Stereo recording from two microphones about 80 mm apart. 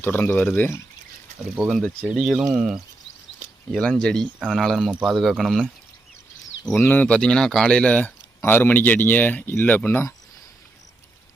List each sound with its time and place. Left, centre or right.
0.0 s speech: left
1.6 s speech: centre
3.8 s speech: centre
6.9 s speech: centre